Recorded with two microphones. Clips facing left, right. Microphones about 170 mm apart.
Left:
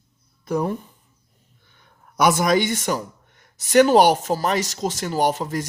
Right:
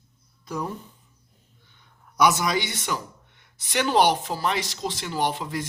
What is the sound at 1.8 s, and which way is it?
A man's voice, 50° left (ahead or behind).